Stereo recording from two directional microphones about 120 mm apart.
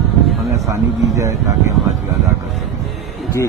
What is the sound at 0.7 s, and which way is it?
Speech, 25° right (ahead or behind).